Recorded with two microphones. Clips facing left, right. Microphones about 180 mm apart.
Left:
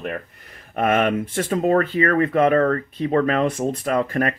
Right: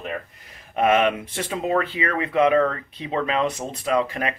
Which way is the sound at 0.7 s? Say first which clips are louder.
Even; 50° left (ahead or behind).